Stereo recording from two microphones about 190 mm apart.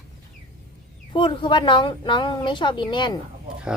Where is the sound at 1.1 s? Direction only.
25° left (ahead or behind).